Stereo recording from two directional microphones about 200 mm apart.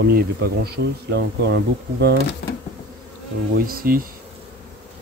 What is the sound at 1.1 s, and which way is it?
Speech, 55° right (ahead or behind).